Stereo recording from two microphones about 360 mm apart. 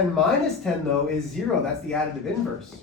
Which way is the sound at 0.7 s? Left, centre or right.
Centre.